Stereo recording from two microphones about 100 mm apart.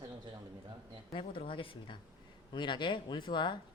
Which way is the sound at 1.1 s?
60° left (ahead or behind).